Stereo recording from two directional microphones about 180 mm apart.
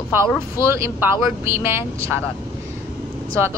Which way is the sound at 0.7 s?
15° right (ahead or behind).